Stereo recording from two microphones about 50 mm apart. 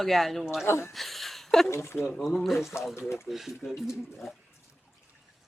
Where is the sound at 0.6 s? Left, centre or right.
Left.